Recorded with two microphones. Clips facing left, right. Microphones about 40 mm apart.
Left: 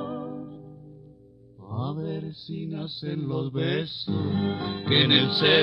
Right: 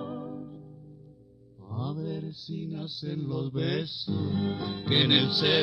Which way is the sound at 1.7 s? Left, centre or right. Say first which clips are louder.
Left 3 dB; left.